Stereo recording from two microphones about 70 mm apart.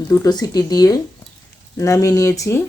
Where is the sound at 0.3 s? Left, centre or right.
Left.